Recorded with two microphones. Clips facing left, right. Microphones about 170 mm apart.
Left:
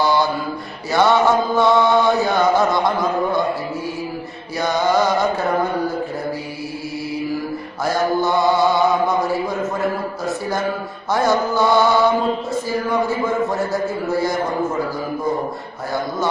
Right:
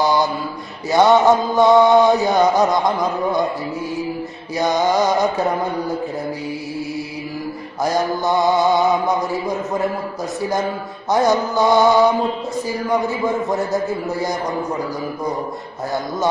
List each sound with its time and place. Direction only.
0.0 s mantra: 20° right (ahead or behind)
0.9 s chant: 20° right (ahead or behind)
4.6 s chant: 15° right (ahead or behind)
7.8 s chant: 15° right (ahead or behind)
11.1 s chant: 15° right (ahead or behind)